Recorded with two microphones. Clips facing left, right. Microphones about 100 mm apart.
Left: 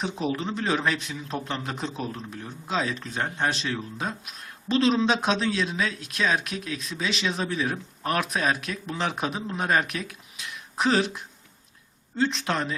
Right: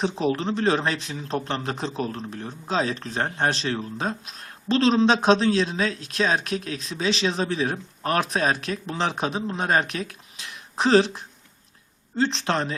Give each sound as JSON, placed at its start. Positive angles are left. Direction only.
{"t": 0.0, "sound": "speech", "side_deg": -35}